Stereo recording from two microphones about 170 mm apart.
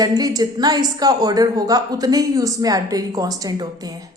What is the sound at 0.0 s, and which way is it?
Speech, 25° right (ahead or behind).